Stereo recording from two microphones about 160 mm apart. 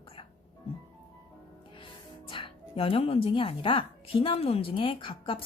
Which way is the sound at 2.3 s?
35° left (ahead or behind).